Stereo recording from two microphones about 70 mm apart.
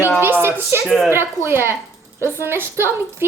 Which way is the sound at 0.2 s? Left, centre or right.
Right.